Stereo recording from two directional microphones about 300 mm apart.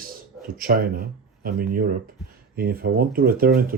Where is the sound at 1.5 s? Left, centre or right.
Right.